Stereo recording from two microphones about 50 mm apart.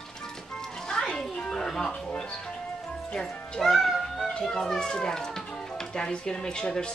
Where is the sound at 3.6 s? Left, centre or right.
Centre.